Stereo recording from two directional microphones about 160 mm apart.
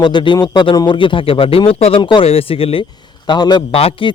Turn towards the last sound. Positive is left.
turn(degrees=35)  # may be behind; listen again after turning